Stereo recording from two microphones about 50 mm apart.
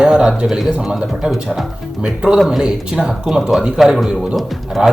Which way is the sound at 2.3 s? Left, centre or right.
Centre.